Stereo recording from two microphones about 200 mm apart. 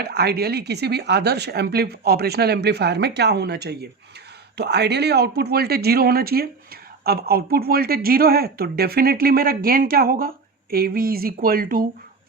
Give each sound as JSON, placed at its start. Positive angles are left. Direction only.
{"t": 0.0, "sound": "speech", "side_deg": -55}